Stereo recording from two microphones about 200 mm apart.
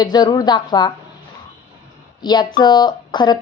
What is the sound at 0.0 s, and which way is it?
Speech, 20° left (ahead or behind).